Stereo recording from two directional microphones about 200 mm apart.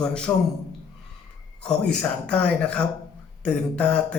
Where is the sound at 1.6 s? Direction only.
5° left (ahead or behind).